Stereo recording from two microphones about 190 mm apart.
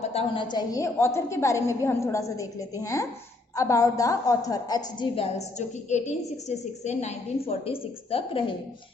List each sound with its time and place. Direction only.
0.0 s a woman's voice: 35° left (ahead or behind)
0.5 s a woman's voice: 15° left (ahead or behind)